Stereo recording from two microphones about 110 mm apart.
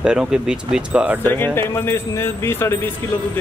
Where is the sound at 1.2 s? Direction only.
20° left (ahead or behind).